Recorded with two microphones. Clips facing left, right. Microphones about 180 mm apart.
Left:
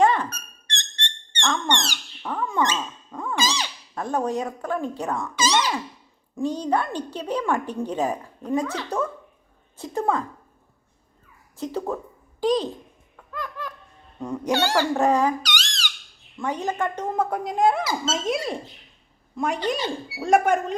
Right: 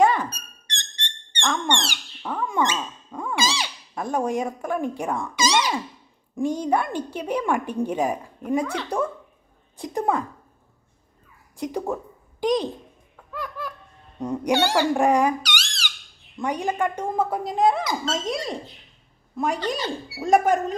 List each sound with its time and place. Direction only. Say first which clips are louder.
0.0 s music: even; 10° right (ahead or behind)
1.4 s owl: even; 10° right (ahead or behind)
6.3 s a woman's voice: right 1 dB; 15° right (ahead or behind)
11.5 s a woman's voice: right 1 dB; 15° right (ahead or behind)
13.3 s a sound: right 1 dB; 10° right (ahead or behind)
14.2 s speech: right 2 dB; 20° right (ahead or behind); by 18.5 s 5° left (ahead or behind)
19.5 s speech: left 1 dB; 15° left (ahead or behind)
20.2 s speech: even; centre (ahead or behind)